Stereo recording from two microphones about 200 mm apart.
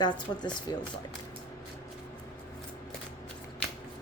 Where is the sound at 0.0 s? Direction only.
20° left (ahead or behind).